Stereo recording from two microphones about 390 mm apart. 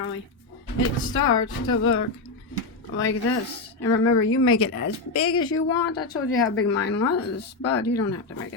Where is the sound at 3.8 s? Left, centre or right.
Left.